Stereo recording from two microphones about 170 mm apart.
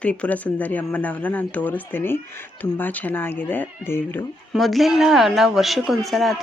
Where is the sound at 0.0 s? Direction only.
5° left (ahead or behind).